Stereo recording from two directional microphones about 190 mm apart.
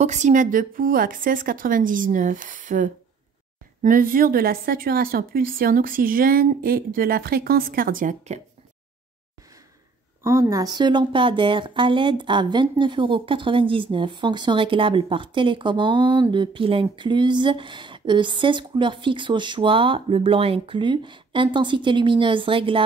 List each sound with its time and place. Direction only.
0.0 s a woman's voice: 40° right (ahead or behind)
10.2 s a woman's voice: 15° right (ahead or behind)